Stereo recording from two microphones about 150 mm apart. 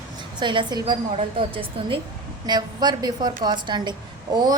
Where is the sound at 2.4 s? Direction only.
30° right (ahead or behind).